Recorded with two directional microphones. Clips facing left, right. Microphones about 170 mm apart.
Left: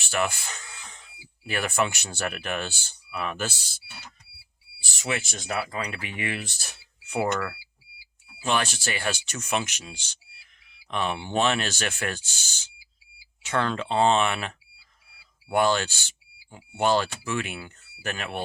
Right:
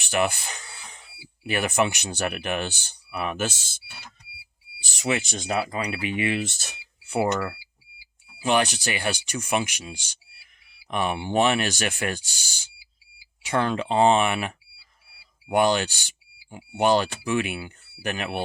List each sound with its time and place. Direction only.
0.0 s speech: 15° right (ahead or behind)
4.8 s speech: 20° right (ahead or behind)